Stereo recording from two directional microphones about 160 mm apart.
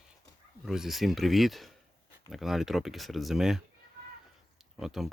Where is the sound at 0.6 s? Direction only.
Centre (ahead or behind).